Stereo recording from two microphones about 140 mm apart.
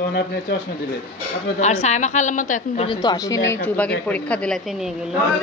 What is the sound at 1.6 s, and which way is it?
A woman's voice, 55° left (ahead or behind).